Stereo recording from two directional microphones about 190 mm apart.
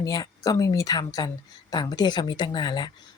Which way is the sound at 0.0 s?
20° left (ahead or behind).